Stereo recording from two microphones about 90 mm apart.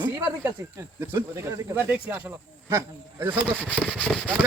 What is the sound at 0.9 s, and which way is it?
Speech, 25° right (ahead or behind).